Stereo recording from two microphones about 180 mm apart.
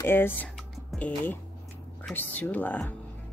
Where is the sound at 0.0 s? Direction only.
10° left (ahead or behind).